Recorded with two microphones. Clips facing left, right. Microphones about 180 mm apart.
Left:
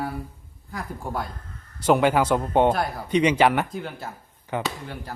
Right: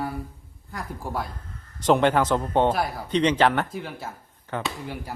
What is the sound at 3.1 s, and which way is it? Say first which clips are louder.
Speech: left 2 dB; 10° left (ahead or behind).